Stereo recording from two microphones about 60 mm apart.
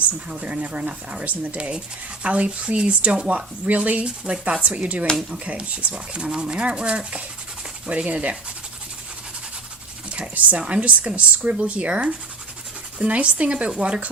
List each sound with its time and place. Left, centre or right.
0.3 s speech: right
10.1 s speech: right